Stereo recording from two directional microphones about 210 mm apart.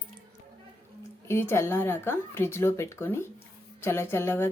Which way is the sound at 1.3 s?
10° left (ahead or behind).